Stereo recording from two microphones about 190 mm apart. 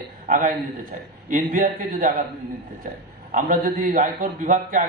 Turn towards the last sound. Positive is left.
turn(degrees=-45)  # may be behind; listen again after turning